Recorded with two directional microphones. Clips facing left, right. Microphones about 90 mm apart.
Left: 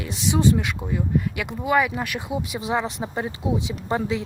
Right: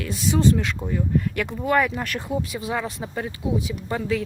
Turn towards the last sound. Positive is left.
turn(degrees=25)  # may be behind; listen again after turning